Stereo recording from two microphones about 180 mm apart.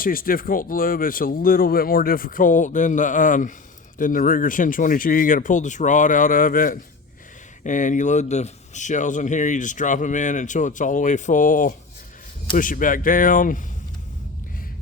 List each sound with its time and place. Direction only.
0.0 s speech: 50° left (ahead or behind)